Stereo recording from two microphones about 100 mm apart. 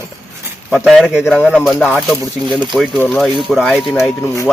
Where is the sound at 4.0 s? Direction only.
30° left (ahead or behind).